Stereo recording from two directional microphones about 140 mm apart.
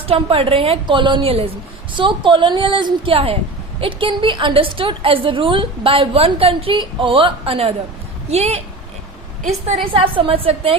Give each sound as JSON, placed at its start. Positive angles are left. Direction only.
{"t": 0.1, "sound": "a woman's voice", "side_deg": -40}
{"t": 9.9, "sound": "a woman's voice", "side_deg": -40}